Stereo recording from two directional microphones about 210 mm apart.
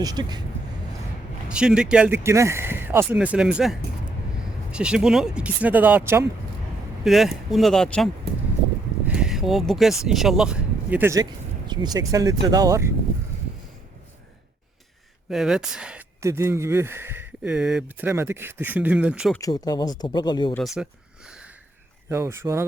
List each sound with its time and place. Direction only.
0.0 s speech: 20° right (ahead or behind)
1.5 s speech: 5° right (ahead or behind)
15.3 s speech: centre (ahead or behind)
19.4 s speech: 15° left (ahead or behind)
20.6 s speech: centre (ahead or behind)
22.1 s speech: 10° right (ahead or behind)